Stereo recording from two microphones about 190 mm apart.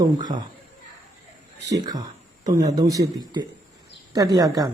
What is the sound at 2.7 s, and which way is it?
Speech, 20° right (ahead or behind).